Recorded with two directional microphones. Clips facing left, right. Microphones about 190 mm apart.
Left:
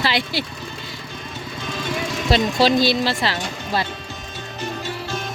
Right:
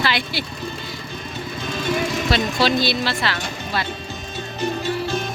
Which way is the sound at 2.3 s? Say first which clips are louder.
Left 5 dB; 35° left (ahead or behind).